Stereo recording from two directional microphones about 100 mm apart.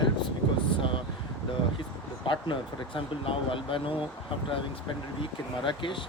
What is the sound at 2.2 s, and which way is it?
Speech, 60° left (ahead or behind).